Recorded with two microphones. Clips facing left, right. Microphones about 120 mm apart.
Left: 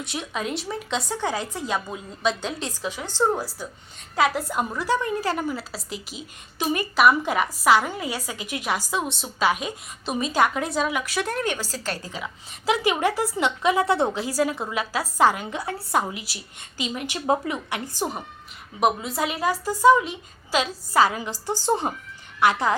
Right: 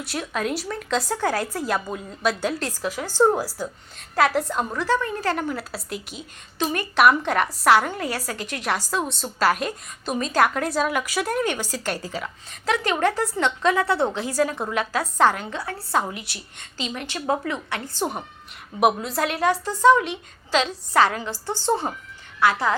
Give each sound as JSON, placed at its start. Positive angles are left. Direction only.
{"t": 0.0, "sound": "a woman's voice", "side_deg": 0}
{"t": 4.1, "sound": "a woman's voice", "side_deg": 0}
{"t": 12.2, "sound": "a woman's voice", "side_deg": 10}
{"t": 18.8, "sound": "a woman's voice", "side_deg": 0}